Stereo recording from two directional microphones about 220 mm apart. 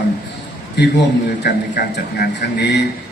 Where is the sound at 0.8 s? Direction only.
50° left (ahead or behind).